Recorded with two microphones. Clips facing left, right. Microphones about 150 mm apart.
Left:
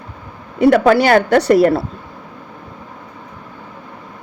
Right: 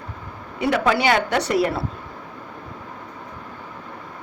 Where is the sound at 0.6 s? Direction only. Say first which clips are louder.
Left 9 dB; 50° left (ahead or behind).